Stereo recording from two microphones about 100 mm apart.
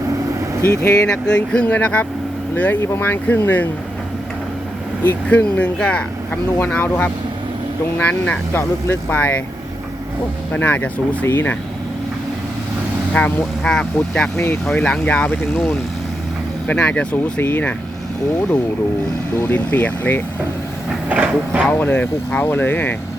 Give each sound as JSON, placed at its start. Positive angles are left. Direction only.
{"t": 1.0, "sound": "speech", "side_deg": 10}
{"t": 5.0, "sound": "speech", "side_deg": 15}
{"t": 10.5, "sound": "speech", "side_deg": 15}
{"t": 13.1, "sound": "speech", "side_deg": 10}
{"t": 14.3, "sound": "speech", "side_deg": 20}
{"t": 14.7, "sound": "speech", "side_deg": 10}
{"t": 19.4, "sound": "speech", "side_deg": 20}
{"t": 21.1, "sound": "speech", "side_deg": -15}
{"t": 21.7, "sound": "speech", "side_deg": 15}